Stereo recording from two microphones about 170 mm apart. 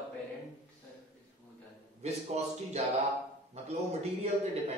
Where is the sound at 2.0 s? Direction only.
40° right (ahead or behind).